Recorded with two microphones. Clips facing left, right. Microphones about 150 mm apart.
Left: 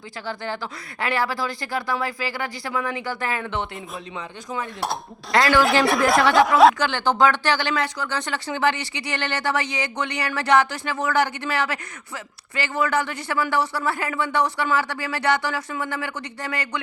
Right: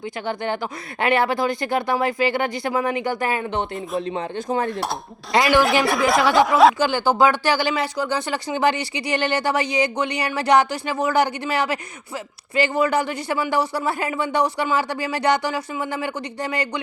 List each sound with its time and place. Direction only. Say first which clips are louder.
0.3 s speech: right 4 dB; 20° right (ahead or behind)
3.5 s speech: right 4 dB; 45° right (ahead or behind)
4.4 s speech: right 7 dB; 30° right (ahead or behind)
4.7 s speech: right 2 dB; centre (ahead or behind)
5.3 s speech: right 1 dB; 20° right (ahead or behind)
5.5 s speech: even; centre (ahead or behind)
6.7 s speech: right 3 dB; 10° right (ahead or behind)